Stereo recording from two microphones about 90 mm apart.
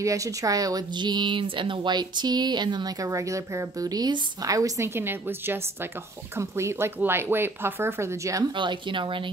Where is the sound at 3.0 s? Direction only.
35° right (ahead or behind).